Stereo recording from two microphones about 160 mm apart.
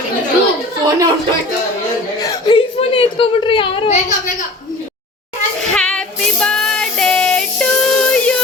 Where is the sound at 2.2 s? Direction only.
25° left (ahead or behind).